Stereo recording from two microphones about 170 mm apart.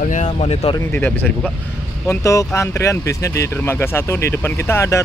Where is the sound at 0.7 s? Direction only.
10° left (ahead or behind).